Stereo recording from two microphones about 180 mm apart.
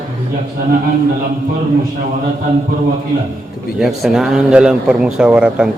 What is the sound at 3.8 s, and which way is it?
A man's voice, 5° right (ahead or behind).